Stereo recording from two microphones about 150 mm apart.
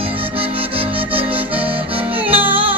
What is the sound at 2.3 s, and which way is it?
Music, 10° right (ahead or behind).